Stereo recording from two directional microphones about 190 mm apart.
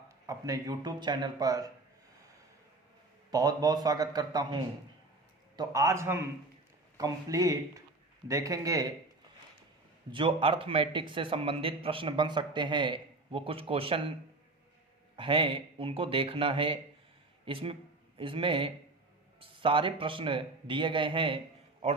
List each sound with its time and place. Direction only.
0.3 s a man's voice: 20° right (ahead or behind)
3.3 s a man's voice: 20° right (ahead or behind)
5.5 s a man's voice: 15° right (ahead or behind)
10.1 s a man's voice: 25° right (ahead or behind)
15.1 s a man's voice: 25° right (ahead or behind)